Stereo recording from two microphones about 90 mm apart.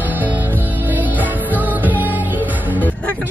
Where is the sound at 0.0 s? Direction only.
20° right (ahead or behind).